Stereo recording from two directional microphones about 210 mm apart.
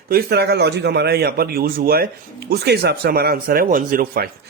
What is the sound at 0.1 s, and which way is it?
Speech, 45° right (ahead or behind).